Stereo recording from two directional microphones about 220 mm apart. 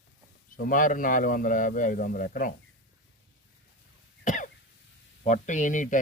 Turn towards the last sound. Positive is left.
turn(degrees=35)  # may be behind; listen again after turning